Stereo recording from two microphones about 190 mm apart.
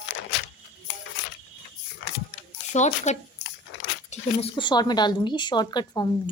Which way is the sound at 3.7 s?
65° left (ahead or behind).